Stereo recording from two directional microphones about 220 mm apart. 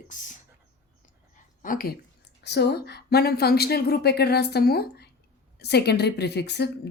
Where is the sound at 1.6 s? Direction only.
40° left (ahead or behind).